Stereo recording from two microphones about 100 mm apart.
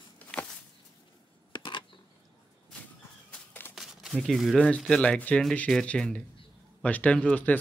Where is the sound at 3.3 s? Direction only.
20° left (ahead or behind).